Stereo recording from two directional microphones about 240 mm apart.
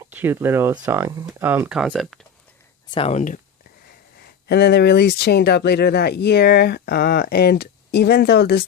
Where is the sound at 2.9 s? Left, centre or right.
Left.